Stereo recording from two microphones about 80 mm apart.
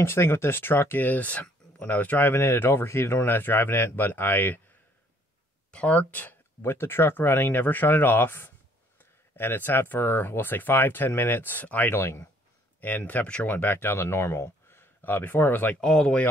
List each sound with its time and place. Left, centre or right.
0.0 s speech: left
5.7 s speech: centre
11.9 s speech: left
12.8 s speech: left
15.8 s speech: centre